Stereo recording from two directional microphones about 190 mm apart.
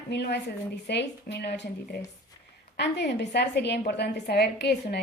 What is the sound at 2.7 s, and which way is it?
A woman's voice, 65° left (ahead or behind).